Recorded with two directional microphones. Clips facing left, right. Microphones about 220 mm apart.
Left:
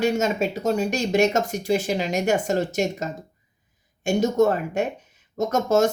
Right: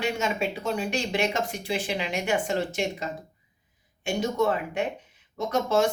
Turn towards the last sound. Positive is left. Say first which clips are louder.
# left 4 dB
turn(degrees=45)  # may be behind; listen again after turning